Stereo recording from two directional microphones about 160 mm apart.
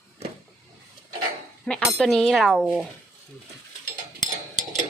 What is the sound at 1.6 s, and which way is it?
Speech, 5° left (ahead or behind).